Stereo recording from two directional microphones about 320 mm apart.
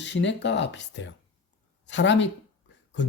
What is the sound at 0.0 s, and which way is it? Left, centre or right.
Speech, left.